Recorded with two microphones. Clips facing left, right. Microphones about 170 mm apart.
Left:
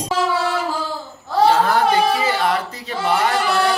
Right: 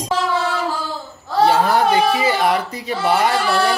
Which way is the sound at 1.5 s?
15° right (ahead or behind).